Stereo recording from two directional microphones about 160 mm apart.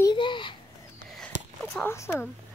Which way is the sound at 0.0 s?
30° left (ahead or behind).